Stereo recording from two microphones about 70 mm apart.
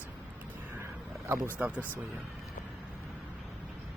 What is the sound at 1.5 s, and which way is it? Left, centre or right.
Speech, right.